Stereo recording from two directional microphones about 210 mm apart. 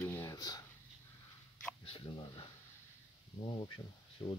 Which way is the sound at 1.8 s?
25° left (ahead or behind).